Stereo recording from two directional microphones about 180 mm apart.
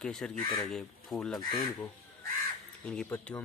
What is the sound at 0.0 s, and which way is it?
Speech, centre (ahead or behind).